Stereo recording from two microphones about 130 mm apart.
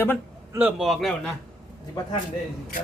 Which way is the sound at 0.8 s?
Centre (ahead or behind).